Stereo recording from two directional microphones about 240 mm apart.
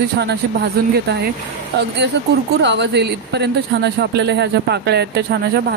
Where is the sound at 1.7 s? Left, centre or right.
Right.